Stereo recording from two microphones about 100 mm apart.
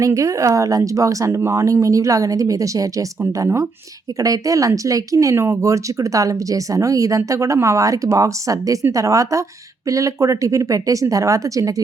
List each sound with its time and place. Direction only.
0.0 s speech: 30° right (ahead or behind)